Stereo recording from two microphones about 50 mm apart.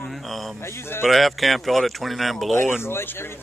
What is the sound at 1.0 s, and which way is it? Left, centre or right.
A man's voice, centre.